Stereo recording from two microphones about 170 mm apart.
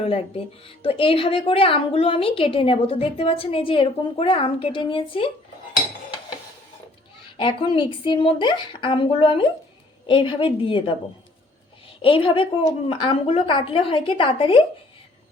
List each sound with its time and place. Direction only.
0.0 s a woman's voice: 35° left (ahead or behind)
7.3 s a woman's voice: 30° left (ahead or behind)
12.0 s a woman's voice: 30° left (ahead or behind)